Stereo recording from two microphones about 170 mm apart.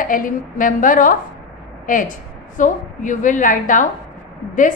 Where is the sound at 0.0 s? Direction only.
50° left (ahead or behind).